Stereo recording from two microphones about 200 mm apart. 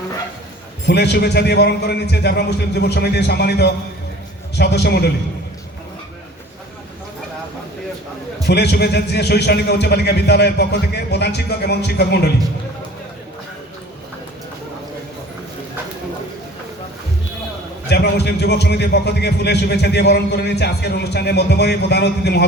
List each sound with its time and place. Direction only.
0.9 s a man's voice: 55° left (ahead or behind)
8.4 s a man's voice: 55° left (ahead or behind)
17.8 s a man's voice: 55° left (ahead or behind)